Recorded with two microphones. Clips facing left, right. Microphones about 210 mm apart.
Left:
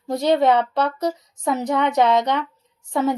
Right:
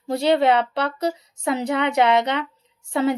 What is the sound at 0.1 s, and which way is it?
Speech, 65° right (ahead or behind).